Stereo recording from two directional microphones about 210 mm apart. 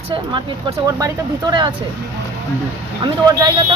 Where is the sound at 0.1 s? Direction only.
20° right (ahead or behind).